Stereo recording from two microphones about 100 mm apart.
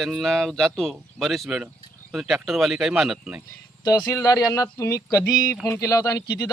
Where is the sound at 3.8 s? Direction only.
45° left (ahead or behind).